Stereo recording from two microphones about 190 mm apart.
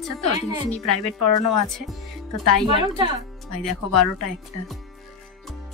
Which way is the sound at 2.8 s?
20° right (ahead or behind).